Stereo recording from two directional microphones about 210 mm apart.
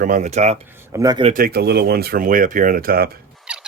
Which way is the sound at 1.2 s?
40° right (ahead or behind).